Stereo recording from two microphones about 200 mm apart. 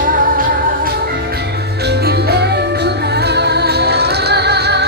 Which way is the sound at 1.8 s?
55° right (ahead or behind).